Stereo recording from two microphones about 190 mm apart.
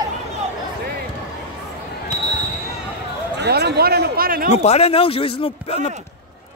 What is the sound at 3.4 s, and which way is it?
Speech, 60° right (ahead or behind).